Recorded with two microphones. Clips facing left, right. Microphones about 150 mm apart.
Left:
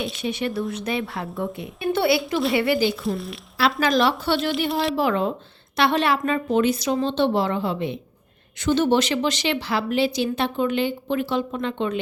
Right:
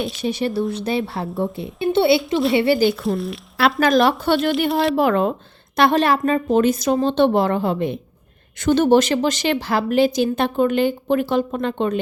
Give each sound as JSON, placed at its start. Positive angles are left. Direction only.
{"t": 0.2, "sound": "a woman's voice", "side_deg": -35}
{"t": 2.7, "sound": "a woman's voice", "side_deg": -50}
{"t": 3.0, "sound": "speech", "side_deg": 0}
{"t": 3.8, "sound": "a woman's voice", "side_deg": -50}
{"t": 4.7, "sound": "speech", "side_deg": 0}
{"t": 4.9, "sound": "a woman's voice", "side_deg": -55}